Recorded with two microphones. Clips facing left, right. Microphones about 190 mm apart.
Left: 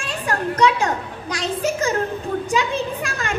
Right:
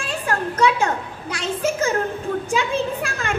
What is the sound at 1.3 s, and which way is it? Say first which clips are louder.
A woman's voice: even; 35° left (ahead or behind).